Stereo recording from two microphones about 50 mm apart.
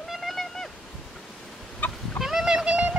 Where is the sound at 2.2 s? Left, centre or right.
Centre.